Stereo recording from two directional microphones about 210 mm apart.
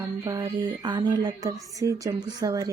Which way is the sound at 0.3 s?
15° right (ahead or behind).